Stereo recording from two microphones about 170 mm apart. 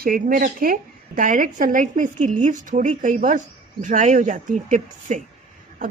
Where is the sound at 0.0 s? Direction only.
55° right (ahead or behind).